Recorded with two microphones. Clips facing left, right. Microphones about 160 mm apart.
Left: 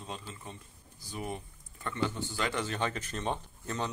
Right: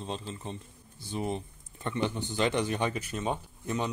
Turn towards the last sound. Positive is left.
turn(degrees=-10)  # may be behind; listen again after turning